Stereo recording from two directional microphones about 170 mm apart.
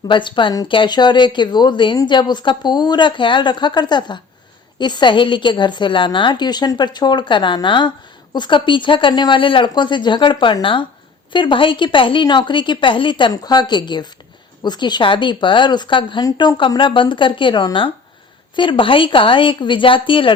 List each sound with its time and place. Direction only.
0.1 s a woman's voice: 30° left (ahead or behind)